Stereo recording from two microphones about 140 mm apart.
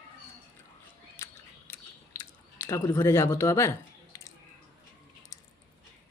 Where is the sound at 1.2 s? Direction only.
15° left (ahead or behind).